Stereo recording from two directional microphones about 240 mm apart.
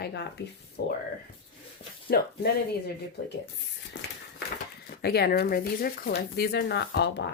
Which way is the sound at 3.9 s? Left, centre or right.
Left.